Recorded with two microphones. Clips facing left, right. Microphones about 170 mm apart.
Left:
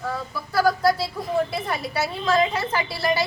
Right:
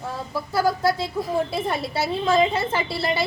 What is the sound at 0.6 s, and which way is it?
A woman's voice, 25° right (ahead or behind).